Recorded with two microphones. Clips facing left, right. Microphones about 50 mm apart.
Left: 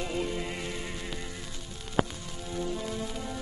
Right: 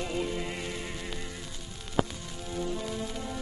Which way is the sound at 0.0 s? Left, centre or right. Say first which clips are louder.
Even; centre.